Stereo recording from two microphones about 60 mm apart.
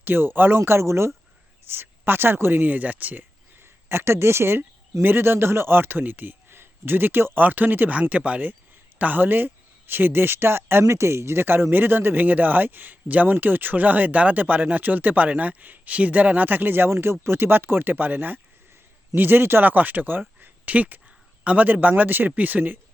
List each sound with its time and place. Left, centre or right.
0.0 s speech: right
1.6 s speech: right